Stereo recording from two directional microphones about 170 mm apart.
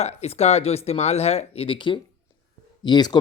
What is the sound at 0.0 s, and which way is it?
Speech, 40° left (ahead or behind).